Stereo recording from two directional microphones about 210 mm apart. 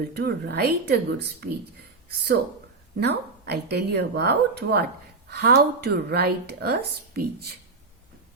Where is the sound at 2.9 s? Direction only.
50° right (ahead or behind).